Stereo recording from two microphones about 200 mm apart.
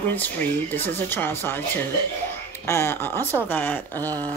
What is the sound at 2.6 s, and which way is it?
Speech, 10° left (ahead or behind).